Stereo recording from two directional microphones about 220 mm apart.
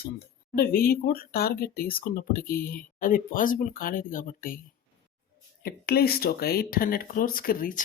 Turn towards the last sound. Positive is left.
turn(degrees=40)  # may be behind; listen again after turning